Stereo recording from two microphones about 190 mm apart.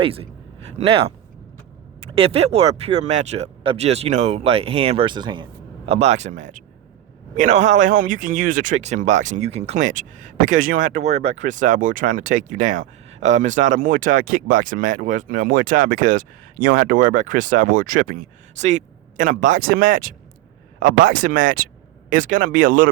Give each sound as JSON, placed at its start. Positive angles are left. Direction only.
{"t": 0.0, "sound": "a man's voice", "side_deg": -30}